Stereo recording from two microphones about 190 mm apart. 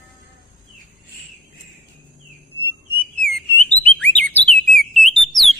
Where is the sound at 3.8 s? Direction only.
5° left (ahead or behind).